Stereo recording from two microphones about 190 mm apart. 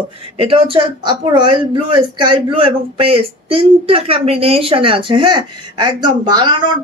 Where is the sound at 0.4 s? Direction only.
30° right (ahead or behind).